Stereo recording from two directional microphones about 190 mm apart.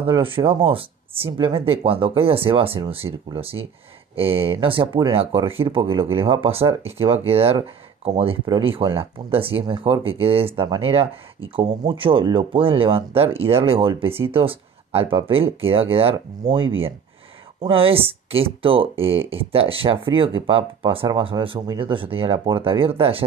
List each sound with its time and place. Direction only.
0.0 s speech: 25° right (ahead or behind)